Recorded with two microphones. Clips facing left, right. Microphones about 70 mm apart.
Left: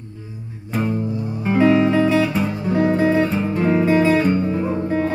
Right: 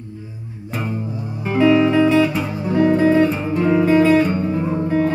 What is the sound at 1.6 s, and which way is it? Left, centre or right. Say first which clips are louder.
Music: right 1 dB; left.